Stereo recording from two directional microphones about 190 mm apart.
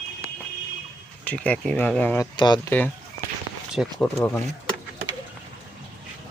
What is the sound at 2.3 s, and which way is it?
Speech, 25° left (ahead or behind).